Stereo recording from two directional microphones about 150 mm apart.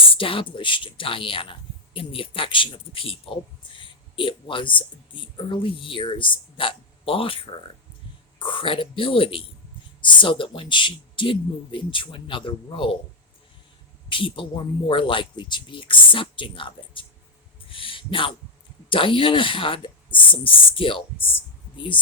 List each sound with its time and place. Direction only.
0.2 s speech: 35° left (ahead or behind)
14.1 s speech: 35° left (ahead or behind)
17.7 s a sound: 35° left (ahead or behind)
18.9 s speech: 35° left (ahead or behind)